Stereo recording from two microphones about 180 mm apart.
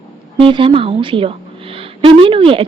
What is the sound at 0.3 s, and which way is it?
A woman's voice, 30° right (ahead or behind).